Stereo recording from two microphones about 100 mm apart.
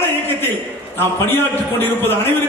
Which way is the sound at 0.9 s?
20° left (ahead or behind).